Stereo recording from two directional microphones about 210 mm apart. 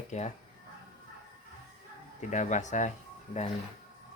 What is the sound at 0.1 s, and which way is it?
Speech, 35° left (ahead or behind).